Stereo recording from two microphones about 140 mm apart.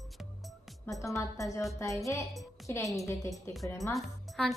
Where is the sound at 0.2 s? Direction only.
Centre (ahead or behind).